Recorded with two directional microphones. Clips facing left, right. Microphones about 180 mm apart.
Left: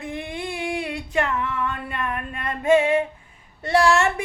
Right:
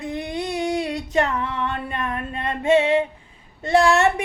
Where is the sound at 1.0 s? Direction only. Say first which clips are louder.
Right 1 dB; 20° right (ahead or behind).